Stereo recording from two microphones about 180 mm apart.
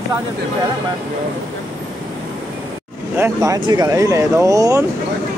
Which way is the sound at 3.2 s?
20° right (ahead or behind).